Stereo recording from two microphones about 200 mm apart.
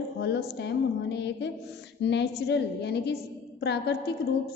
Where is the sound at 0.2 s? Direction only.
55° left (ahead or behind).